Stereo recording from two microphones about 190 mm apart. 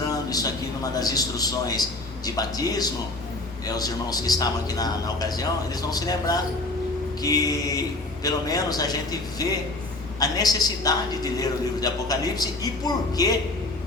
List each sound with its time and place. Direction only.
0.1 s a man's voice: 20° left (ahead or behind)
10.2 s a man's voice: 20° left (ahead or behind)